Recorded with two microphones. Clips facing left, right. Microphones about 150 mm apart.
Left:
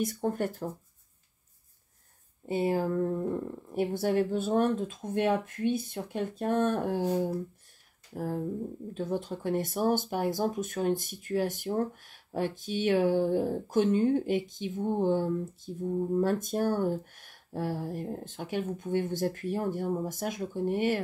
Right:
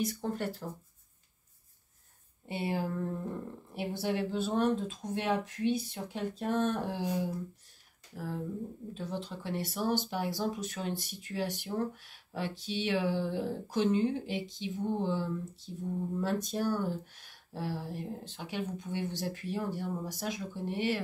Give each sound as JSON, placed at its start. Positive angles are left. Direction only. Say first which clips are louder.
{"t": 0.0, "sound": "speech", "louder": "left 4 dB", "side_deg": 50}
{"t": 2.4, "sound": "speech", "louder": "left 6 dB", "side_deg": 45}